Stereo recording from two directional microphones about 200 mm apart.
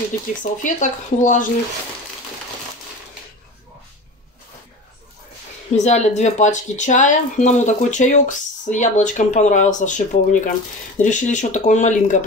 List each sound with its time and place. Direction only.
0.4 s speech: 40° left (ahead or behind)
5.8 s speech: 35° left (ahead or behind)